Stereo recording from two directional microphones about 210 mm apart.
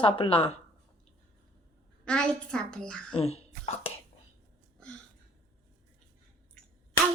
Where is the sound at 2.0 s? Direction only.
5° left (ahead or behind).